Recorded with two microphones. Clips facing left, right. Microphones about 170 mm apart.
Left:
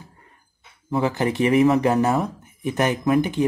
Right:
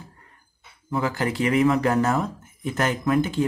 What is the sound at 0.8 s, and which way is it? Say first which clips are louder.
Speech: left 3 dB; 25° left (ahead or behind).